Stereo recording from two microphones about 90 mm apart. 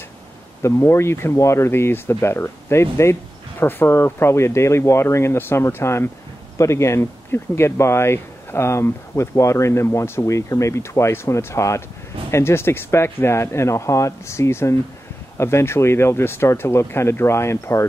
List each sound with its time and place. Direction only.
0.6 s speech: 30° left (ahead or behind)